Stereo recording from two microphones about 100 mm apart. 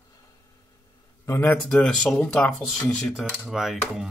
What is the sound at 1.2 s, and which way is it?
Speech, 25° left (ahead or behind).